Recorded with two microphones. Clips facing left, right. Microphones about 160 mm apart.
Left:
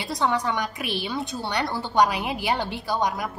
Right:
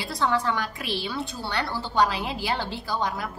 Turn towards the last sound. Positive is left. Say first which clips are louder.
# left 3 dB
turn(degrees=15)  # may be behind; listen again after turning